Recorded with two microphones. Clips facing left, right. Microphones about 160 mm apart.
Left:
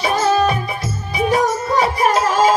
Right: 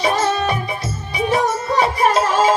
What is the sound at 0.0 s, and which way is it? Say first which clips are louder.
Music: left 2 dB; 30° right (ahead or behind).